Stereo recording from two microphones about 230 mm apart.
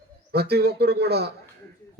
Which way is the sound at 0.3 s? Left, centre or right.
Right.